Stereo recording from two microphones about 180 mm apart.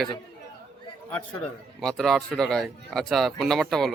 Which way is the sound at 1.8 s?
Centre (ahead or behind).